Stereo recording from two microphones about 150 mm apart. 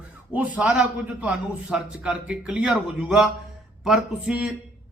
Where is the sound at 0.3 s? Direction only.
10° right (ahead or behind).